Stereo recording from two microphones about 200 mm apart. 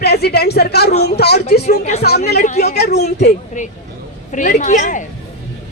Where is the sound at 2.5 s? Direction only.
35° left (ahead or behind).